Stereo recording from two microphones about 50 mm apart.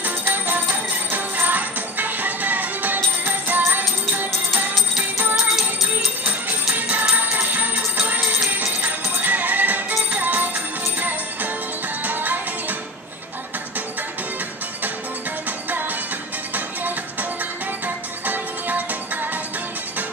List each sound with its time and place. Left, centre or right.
0.0 s music: right
5.3 s music: centre
6.2 s music: right
16.5 s music: right